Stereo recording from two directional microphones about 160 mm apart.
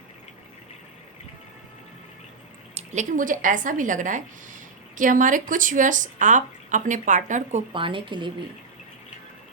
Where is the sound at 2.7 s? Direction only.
45° right (ahead or behind).